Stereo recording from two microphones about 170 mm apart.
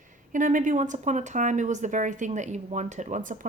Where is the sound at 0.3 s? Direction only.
50° right (ahead or behind).